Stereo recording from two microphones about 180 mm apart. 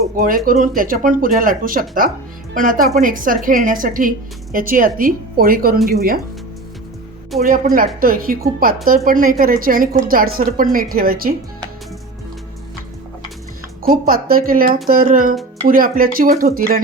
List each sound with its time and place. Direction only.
0.2 s a woman's voice: 50° right (ahead or behind)
7.3 s a woman's voice: 50° right (ahead or behind)
13.8 s a woman's voice: 55° right (ahead or behind)